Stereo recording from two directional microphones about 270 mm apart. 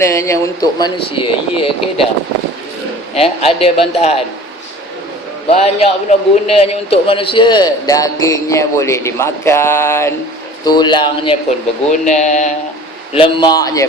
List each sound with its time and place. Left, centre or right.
0.0 s a man's voice: centre
3.2 s a man's voice: left
5.5 s a man's voice: left